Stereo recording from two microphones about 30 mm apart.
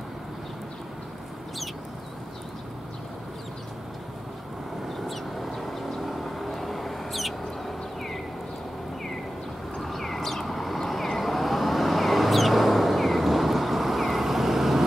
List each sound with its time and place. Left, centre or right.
4.8 s vehicle: centre
9.8 s vehicle: centre